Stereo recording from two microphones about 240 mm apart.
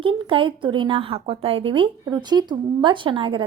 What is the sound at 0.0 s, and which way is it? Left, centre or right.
Speech, right.